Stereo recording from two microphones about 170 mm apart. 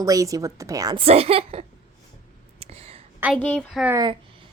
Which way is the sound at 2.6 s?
35° right (ahead or behind).